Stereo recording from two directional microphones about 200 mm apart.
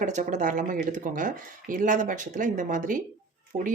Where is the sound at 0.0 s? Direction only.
35° right (ahead or behind).